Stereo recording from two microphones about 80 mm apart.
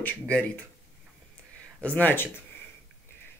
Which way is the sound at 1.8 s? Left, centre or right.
Left.